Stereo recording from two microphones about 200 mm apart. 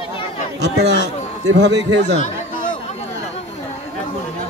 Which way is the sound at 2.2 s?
40° left (ahead or behind).